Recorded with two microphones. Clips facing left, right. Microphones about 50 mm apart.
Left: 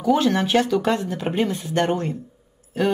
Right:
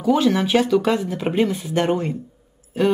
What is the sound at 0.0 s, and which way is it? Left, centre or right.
Speech, centre.